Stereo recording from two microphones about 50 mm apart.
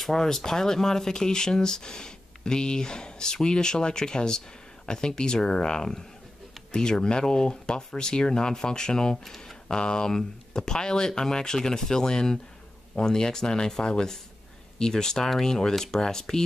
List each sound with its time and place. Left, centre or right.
0.0 s speech: centre